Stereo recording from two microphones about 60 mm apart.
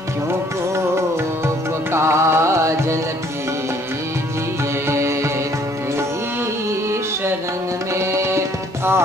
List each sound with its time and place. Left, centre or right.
1.4 s music: right
4.8 s music: right
7.9 s music: right